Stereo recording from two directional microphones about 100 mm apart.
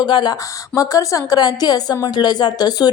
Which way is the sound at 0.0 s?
45° left (ahead or behind).